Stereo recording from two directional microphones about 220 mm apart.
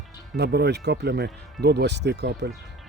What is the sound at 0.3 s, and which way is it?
Speech, 50° right (ahead or behind).